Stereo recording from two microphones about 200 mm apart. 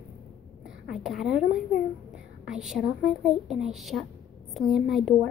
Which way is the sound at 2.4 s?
Centre (ahead or behind).